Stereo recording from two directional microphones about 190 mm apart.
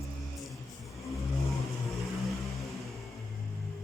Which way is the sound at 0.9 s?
Centre (ahead or behind).